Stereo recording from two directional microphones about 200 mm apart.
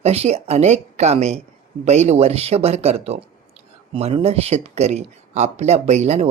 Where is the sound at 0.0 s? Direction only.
30° right (ahead or behind).